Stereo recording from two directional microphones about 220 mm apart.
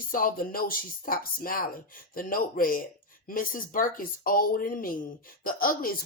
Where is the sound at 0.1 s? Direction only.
40° left (ahead or behind).